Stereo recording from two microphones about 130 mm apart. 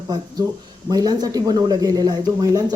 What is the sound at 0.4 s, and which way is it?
Speech, 30° right (ahead or behind).